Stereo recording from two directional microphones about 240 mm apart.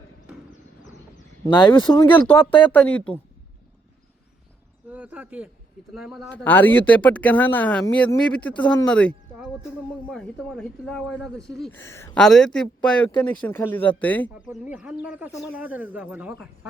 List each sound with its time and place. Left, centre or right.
1.1 s speech: centre
2.0 s speech: centre
4.9 s speech: centre
14.3 s speech: centre